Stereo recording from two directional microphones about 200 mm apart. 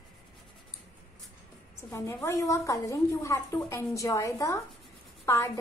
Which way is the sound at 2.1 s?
15° left (ahead or behind).